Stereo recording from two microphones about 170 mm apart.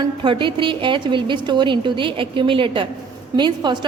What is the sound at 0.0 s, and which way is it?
A woman's voice, 30° right (ahead or behind).